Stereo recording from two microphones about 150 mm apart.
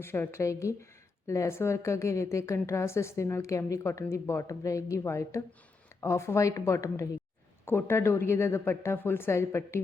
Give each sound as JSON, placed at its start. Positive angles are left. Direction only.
{"t": 0.0, "sound": "a woman's voice", "side_deg": 15}